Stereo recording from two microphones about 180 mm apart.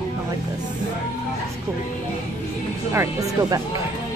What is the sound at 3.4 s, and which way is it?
Speech, 25° right (ahead or behind).